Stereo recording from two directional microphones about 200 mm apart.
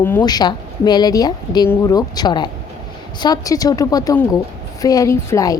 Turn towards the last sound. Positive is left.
turn(degrees=15)  # may be behind; listen again after turning